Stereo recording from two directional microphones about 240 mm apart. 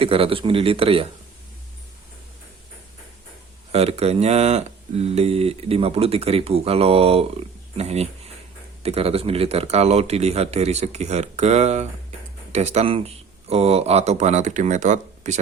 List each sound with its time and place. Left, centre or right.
0.0 s speech: right
3.7 s speech: right